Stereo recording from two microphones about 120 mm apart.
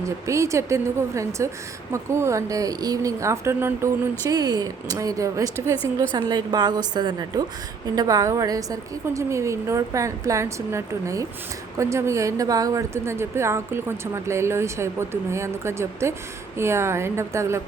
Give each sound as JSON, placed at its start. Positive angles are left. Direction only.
{"t": 0.3, "sound": "a woman's voice", "side_deg": -25}
{"t": 4.3, "sound": "a woman's voice", "side_deg": -35}